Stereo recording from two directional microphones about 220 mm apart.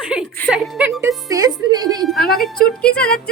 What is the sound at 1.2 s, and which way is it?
Speech, 15° right (ahead or behind).